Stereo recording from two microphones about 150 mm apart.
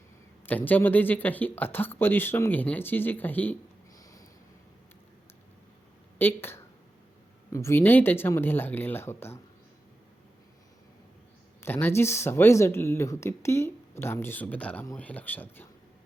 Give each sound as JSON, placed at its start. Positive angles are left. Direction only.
{"t": 0.4, "sound": "speech", "side_deg": 10}
{"t": 3.9, "sound": "a sound", "side_deg": 25}
{"t": 6.1, "sound": "speech", "side_deg": 15}
{"t": 11.6, "sound": "speech", "side_deg": 15}